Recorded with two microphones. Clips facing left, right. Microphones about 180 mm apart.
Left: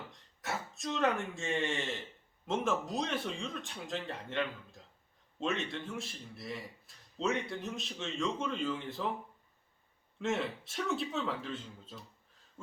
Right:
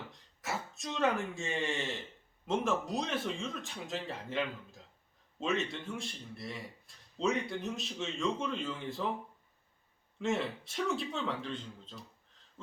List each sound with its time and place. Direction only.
0.1 s a man's voice: centre (ahead or behind)
10.2 s a man's voice: centre (ahead or behind)